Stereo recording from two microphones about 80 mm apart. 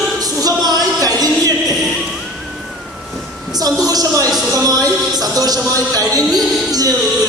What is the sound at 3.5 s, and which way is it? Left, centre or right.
Music, right.